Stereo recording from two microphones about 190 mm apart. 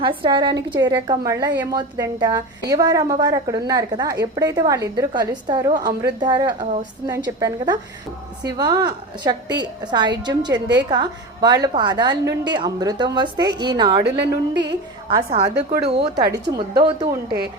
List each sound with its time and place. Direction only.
0.0 s a woman's voice: 25° right (ahead or behind)
14.0 s a woman's voice: 65° right (ahead or behind)
15.1 s a woman's voice: 30° right (ahead or behind)